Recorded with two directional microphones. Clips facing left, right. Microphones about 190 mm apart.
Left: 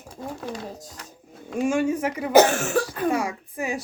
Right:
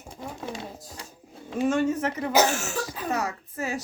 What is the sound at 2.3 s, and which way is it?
Cough, 55° left (ahead or behind).